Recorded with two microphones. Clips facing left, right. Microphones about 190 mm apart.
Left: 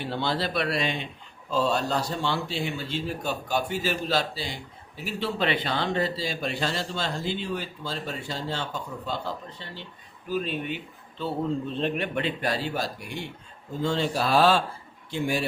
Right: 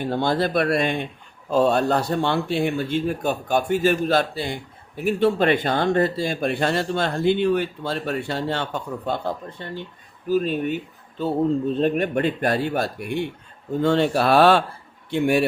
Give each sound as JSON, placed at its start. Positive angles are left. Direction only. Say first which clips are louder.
{"t": 0.0, "sound": "speech", "louder": "right 7 dB", "side_deg": -50}